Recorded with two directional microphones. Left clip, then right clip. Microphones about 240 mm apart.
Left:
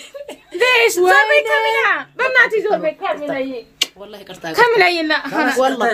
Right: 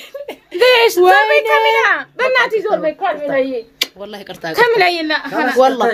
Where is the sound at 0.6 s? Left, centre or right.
Centre.